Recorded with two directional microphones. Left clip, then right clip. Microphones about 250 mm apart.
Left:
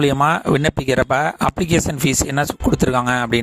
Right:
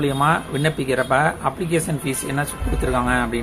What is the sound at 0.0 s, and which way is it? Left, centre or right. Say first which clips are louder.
Speech: left 3 dB; left.